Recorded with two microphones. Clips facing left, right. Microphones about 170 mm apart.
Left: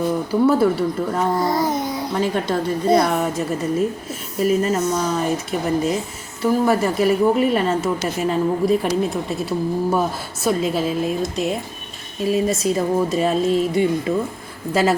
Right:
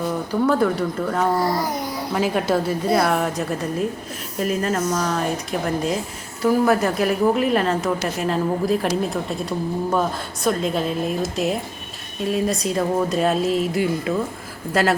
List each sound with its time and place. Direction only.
0.4 s a woman's voice: 5° left (ahead or behind)
1.4 s a child's voice: 20° left (ahead or behind)
2.1 s a woman's voice: 5° right (ahead or behind)